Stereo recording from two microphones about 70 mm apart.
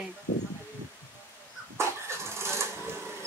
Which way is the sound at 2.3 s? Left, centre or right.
Right.